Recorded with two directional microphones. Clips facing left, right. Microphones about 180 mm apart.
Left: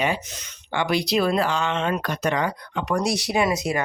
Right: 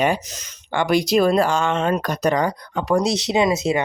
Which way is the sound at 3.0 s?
20° right (ahead or behind).